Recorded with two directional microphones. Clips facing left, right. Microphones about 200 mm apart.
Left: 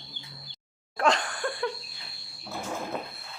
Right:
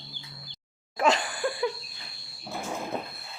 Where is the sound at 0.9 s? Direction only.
5° right (ahead or behind).